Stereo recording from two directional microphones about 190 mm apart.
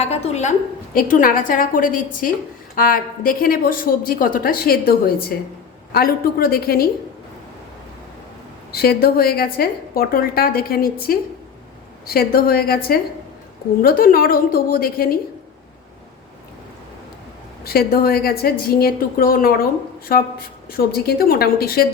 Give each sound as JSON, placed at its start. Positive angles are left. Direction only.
{"t": 0.0, "sound": "a woman's voice", "side_deg": 35}
{"t": 8.7, "sound": "a woman's voice", "side_deg": 55}
{"t": 17.7, "sound": "a woman's voice", "side_deg": 50}